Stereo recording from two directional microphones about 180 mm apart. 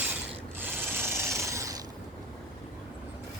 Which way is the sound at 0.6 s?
15° right (ahead or behind).